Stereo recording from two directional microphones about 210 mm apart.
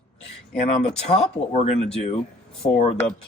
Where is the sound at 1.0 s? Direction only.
30° left (ahead or behind).